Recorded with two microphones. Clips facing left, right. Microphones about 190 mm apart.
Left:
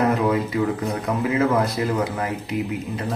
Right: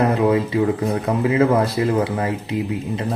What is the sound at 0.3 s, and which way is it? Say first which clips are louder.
Speech: right 4 dB; 25° right (ahead or behind).